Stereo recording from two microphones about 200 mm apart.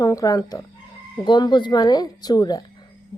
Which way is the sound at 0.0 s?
15° left (ahead or behind).